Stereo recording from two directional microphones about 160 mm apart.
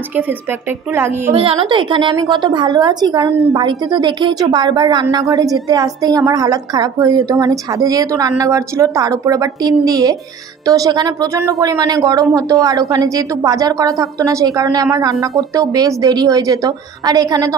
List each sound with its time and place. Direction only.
0.9 s a woman's voice: 15° right (ahead or behind)
1.3 s a woman's voice: 35° right (ahead or behind)